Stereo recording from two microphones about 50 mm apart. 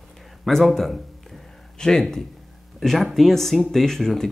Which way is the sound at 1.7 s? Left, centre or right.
Centre.